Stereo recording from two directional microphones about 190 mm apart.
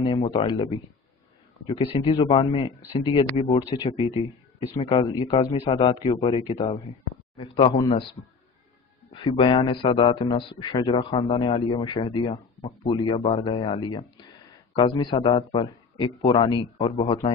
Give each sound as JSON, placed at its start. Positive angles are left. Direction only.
{"t": 0.0, "sound": "speech", "side_deg": 25}